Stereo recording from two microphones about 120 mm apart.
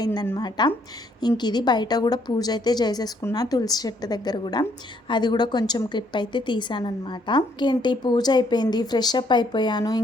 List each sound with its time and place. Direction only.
0.0 s a woman's voice: 35° left (ahead or behind)